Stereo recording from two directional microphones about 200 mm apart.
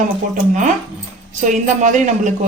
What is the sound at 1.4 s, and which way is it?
Speech, 40° right (ahead or behind).